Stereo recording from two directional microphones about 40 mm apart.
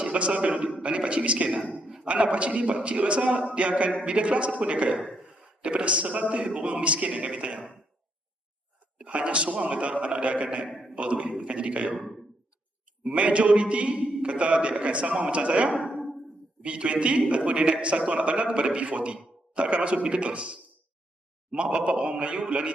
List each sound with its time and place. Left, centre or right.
0.0 s a man's voice: right
9.0 s a man's voice: right
13.1 s a man's voice: right